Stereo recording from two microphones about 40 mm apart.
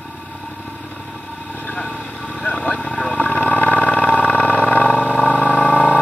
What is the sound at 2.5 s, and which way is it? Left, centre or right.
Vehicle, left.